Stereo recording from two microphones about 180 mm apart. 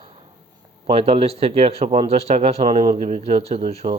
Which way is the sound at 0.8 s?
35° right (ahead or behind).